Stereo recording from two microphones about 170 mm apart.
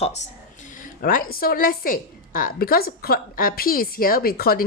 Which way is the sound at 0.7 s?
50° left (ahead or behind).